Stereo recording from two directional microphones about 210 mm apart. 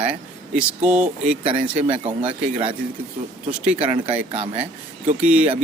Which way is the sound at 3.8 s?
25° right (ahead or behind).